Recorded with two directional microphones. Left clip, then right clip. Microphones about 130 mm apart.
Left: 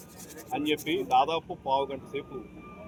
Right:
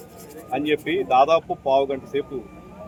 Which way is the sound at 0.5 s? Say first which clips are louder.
Right 7 dB; 30° right (ahead or behind).